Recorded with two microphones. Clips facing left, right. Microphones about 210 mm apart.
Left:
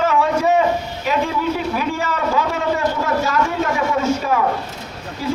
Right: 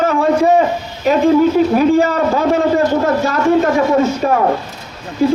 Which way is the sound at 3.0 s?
45° right (ahead or behind).